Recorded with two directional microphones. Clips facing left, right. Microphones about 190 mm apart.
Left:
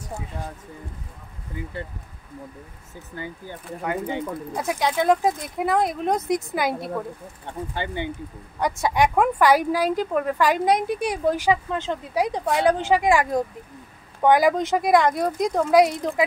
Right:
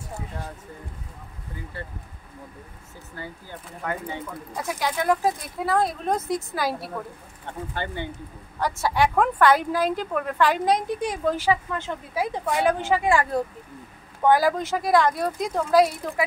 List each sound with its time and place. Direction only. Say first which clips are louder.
3.2 s speech: left 3 dB; 20° left (ahead or behind)